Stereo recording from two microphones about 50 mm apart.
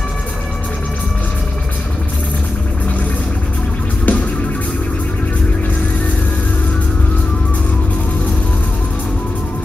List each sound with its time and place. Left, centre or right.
4.0 s music: left